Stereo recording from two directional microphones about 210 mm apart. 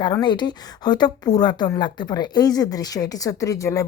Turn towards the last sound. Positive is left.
turn(degrees=15)  # may be behind; listen again after turning